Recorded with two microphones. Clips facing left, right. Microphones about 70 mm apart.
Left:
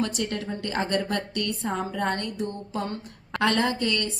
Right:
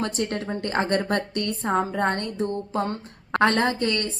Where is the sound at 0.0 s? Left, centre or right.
Right.